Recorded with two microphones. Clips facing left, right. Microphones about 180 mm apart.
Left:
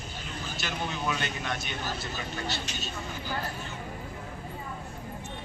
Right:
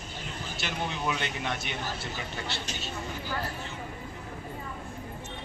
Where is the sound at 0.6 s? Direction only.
25° right (ahead or behind).